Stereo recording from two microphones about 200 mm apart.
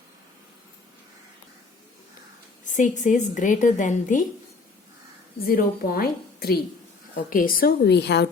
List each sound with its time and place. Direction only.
2.6 s a woman's voice: 40° left (ahead or behind)
5.5 s a woman's voice: 45° left (ahead or behind)